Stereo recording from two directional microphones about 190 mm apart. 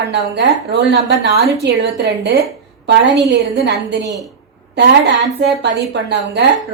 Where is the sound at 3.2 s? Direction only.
65° right (ahead or behind).